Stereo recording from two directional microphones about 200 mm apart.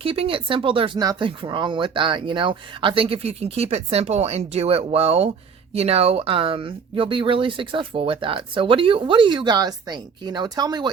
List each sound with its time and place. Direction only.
0.0 s speech: 30° right (ahead or behind)